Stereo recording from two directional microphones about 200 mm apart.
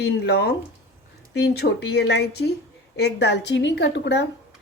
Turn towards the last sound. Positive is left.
turn(degrees=60)  # may be behind; listen again after turning